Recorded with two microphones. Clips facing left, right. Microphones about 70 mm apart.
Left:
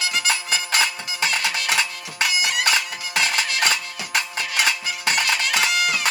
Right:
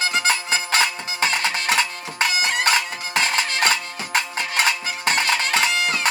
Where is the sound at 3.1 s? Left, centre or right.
Right.